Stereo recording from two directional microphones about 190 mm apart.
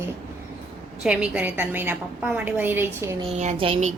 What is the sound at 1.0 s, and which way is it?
A woman's voice, 5° right (ahead or behind).